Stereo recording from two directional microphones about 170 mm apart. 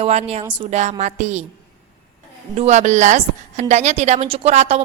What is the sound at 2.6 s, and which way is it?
A woman's voice, 40° right (ahead or behind).